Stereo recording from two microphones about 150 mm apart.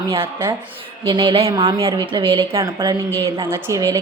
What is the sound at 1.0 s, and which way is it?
A woman's voice, 35° right (ahead or behind).